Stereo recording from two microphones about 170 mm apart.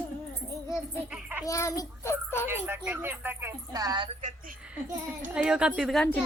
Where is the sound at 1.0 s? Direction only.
5° right (ahead or behind).